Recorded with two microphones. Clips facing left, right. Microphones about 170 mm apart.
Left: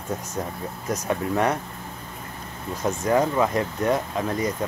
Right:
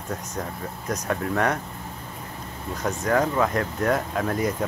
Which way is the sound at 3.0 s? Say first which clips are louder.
Left 1 dB; 15° left (ahead or behind).